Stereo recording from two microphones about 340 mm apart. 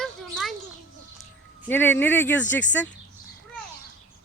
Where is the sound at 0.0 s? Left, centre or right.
Centre.